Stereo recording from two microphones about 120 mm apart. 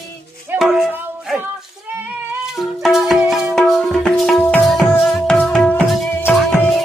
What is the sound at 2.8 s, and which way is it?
Music, centre (ahead or behind).